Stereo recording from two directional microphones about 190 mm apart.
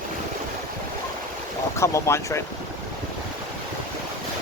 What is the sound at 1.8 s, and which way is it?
Speech, 15° left (ahead or behind).